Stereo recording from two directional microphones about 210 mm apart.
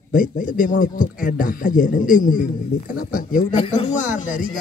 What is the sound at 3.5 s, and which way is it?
Speech, 30° left (ahead or behind).